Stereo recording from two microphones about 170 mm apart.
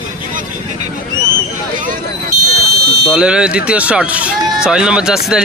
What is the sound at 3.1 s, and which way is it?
Speech, 5° right (ahead or behind).